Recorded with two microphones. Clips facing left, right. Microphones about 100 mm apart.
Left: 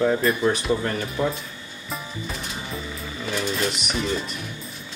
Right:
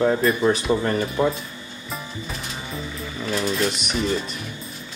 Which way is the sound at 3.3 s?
Centre (ahead or behind).